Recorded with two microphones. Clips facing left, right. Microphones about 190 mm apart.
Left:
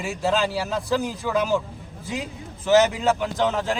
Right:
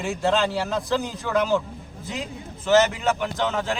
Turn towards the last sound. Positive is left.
turn(degrees=10)  # may be behind; listen again after turning